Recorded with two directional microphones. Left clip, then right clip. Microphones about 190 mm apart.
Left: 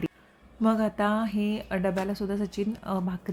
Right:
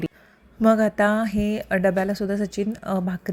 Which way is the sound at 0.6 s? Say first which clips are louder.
Right 7 dB; 25° right (ahead or behind).